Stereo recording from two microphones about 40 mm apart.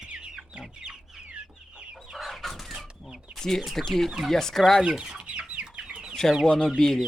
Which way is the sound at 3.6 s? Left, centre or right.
Centre.